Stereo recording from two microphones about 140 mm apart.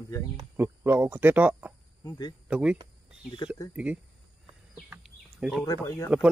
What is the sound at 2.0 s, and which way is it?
Speech, 30° left (ahead or behind).